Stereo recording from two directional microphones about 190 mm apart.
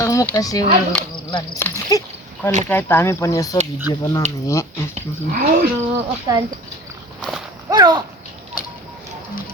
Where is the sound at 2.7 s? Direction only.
10° left (ahead or behind).